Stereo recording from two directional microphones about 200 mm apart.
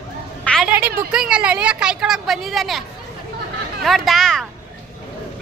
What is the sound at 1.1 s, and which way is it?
A woman's voice, 5° right (ahead or behind).